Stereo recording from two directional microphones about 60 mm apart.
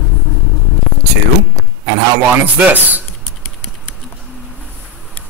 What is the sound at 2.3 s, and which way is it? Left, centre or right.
Speech, right.